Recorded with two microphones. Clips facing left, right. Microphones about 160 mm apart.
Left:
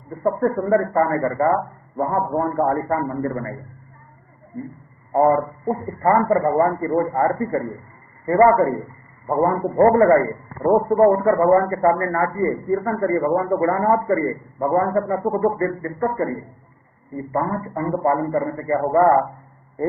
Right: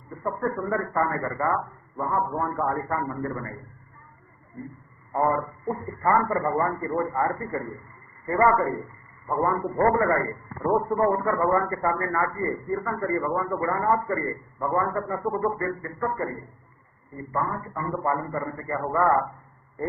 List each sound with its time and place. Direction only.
0.3 s a man's voice: 45° left (ahead or behind)
5.1 s a man's voice: 45° left (ahead or behind)
17.3 s a man's voice: 45° left (ahead or behind)